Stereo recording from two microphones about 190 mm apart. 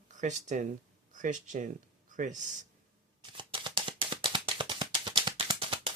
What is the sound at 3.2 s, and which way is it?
Shuffling cards, 25° right (ahead or behind).